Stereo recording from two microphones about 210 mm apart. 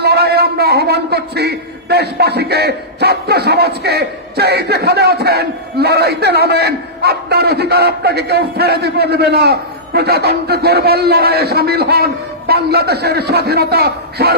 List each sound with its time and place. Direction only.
0.0 s a man's voice: 50° right (ahead or behind)